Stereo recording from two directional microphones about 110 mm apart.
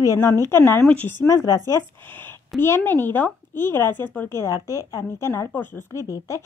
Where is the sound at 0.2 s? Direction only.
25° left (ahead or behind).